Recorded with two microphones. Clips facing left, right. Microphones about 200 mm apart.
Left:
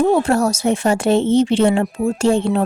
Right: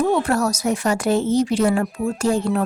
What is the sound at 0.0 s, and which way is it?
Speech, 30° left (ahead or behind).